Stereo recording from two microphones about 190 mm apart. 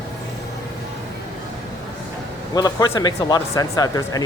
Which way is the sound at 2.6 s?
20° left (ahead or behind).